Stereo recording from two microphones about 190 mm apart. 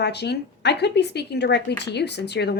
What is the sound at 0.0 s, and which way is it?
A woman's voice, 60° left (ahead or behind).